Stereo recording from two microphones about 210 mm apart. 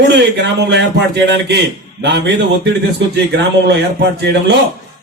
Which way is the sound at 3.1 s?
50° right (ahead or behind).